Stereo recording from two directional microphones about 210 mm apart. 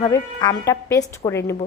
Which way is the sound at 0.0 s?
20° left (ahead or behind).